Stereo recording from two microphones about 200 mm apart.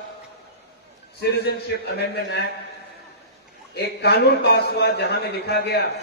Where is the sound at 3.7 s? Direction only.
55° left (ahead or behind).